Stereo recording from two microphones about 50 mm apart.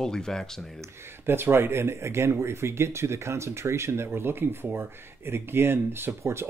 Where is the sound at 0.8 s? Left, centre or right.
Right.